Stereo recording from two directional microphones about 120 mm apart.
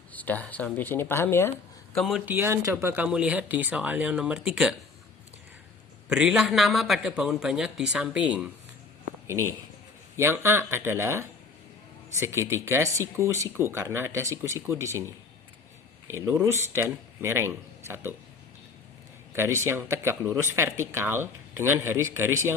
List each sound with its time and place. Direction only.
0.1 s speech: 15° left (ahead or behind)
2.2 s speech: 20° right (ahead or behind)
6.1 s a man's voice: 5° right (ahead or behind)
9.2 s speech: 25° right (ahead or behind)
19.3 s speech: 20° right (ahead or behind)